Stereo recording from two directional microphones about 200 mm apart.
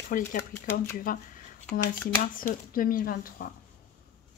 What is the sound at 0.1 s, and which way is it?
Speech, 45° left (ahead or behind).